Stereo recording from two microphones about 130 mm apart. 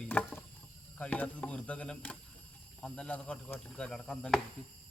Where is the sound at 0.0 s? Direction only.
10° left (ahead or behind).